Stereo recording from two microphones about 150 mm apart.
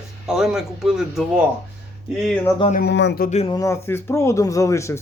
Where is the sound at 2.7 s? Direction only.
80° left.